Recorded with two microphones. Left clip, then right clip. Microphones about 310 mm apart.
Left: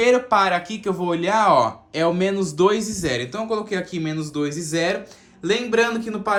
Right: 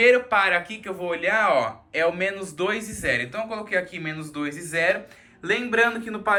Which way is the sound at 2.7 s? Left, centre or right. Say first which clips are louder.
Left 3 dB; centre.